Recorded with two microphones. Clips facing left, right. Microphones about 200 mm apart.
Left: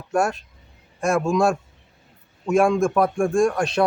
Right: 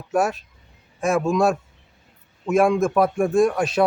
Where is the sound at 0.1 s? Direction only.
5° right (ahead or behind).